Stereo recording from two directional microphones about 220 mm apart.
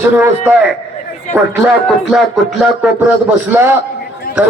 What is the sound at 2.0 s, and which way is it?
A man's voice, centre (ahead or behind).